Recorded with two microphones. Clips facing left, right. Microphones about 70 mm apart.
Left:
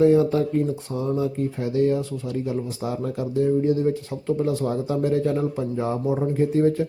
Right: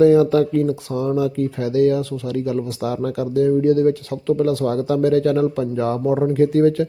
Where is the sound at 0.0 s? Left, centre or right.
Right.